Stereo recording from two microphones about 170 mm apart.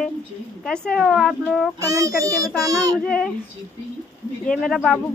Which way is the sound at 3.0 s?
5° left (ahead or behind).